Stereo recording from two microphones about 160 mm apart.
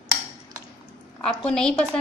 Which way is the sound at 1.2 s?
5° left (ahead or behind).